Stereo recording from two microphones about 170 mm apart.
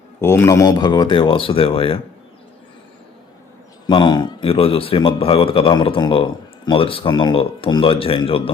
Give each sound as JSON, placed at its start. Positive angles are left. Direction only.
{"t": 0.2, "sound": "speech", "side_deg": 15}
{"t": 3.8, "sound": "speech", "side_deg": 30}